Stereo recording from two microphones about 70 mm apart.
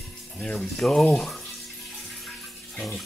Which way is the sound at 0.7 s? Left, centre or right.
Centre.